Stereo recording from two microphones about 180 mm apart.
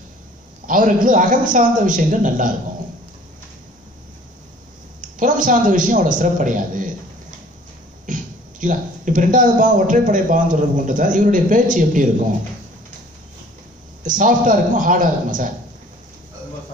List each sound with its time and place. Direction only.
0.7 s a man's voice: 50° right (ahead or behind)
5.0 s a man's voice: 45° right (ahead or behind)
14.0 s a man's voice: 45° right (ahead or behind)